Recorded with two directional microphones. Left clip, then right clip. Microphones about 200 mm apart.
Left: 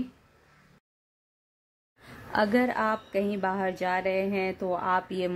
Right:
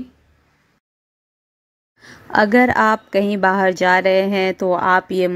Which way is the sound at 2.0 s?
35° right (ahead or behind).